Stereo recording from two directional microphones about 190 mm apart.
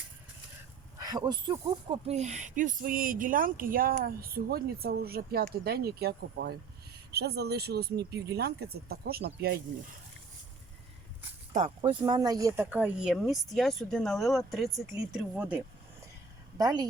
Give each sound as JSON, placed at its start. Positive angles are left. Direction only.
{"t": 0.9, "sound": "speech", "side_deg": -20}
{"t": 11.8, "sound": "speech", "side_deg": -20}
{"t": 16.6, "sound": "a woman's voice", "side_deg": -20}